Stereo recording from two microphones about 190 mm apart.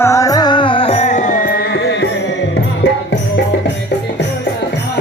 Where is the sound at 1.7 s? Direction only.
60° left (ahead or behind).